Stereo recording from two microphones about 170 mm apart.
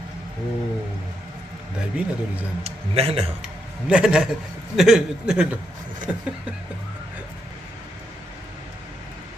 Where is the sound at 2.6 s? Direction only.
35° right (ahead or behind).